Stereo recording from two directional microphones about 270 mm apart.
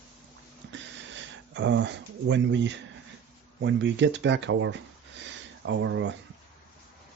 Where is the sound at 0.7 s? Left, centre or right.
Right.